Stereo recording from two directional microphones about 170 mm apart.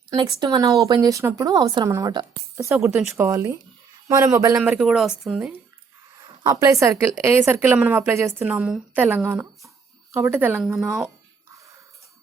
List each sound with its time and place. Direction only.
0.3 s speech: 20° right (ahead or behind)
2.7 s speech: 5° right (ahead or behind)
3.2 s a woman's voice: 20° right (ahead or behind); by 5.5 s 5° right (ahead or behind)
6.1 s a woman's voice: 20° right (ahead or behind)
10.6 s speech: centre (ahead or behind)